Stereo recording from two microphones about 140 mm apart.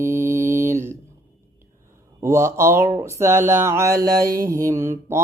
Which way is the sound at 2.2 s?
20° right (ahead or behind).